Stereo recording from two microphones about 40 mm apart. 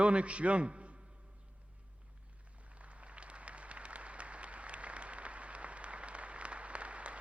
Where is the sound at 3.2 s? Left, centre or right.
Right.